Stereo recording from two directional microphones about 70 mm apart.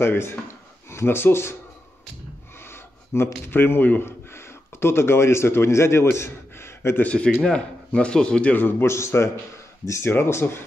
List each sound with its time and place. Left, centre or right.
0.0 s speech: left
2.7 s a sound: left
3.4 s speech: left
7.0 s speech: centre; by 10.6 s left